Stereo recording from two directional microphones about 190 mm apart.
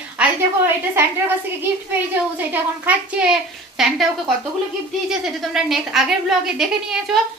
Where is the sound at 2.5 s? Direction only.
10° right (ahead or behind).